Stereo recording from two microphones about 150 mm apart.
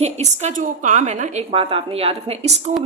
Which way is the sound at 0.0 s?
50° right (ahead or behind).